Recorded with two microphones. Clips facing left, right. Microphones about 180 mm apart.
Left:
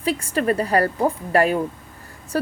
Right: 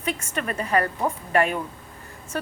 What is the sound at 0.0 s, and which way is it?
A woman's voice, 35° left (ahead or behind).